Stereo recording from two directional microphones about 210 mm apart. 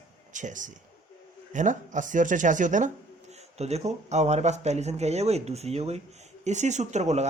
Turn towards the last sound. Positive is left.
turn(degrees=-35)  # may be behind; listen again after turning